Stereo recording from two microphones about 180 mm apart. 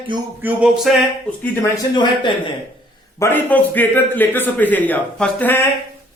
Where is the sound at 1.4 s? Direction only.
15° left (ahead or behind).